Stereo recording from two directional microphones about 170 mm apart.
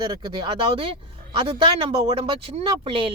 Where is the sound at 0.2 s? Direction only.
30° right (ahead or behind).